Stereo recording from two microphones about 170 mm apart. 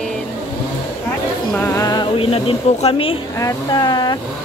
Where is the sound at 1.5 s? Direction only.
15° left (ahead or behind).